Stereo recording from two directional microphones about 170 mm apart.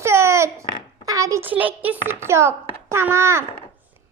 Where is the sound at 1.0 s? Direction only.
20° right (ahead or behind).